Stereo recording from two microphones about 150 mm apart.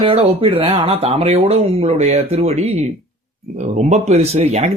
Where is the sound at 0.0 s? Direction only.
40° right (ahead or behind).